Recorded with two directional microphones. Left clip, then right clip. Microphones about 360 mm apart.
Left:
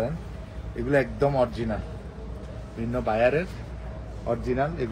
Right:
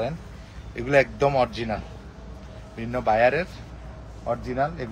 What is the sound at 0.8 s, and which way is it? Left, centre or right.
Speech, centre.